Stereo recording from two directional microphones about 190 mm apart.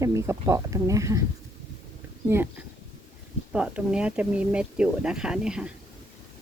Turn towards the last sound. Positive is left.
turn(degrees=-5)  # may be behind; listen again after turning